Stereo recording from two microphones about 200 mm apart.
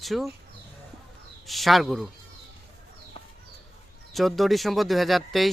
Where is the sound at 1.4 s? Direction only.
Centre (ahead or behind).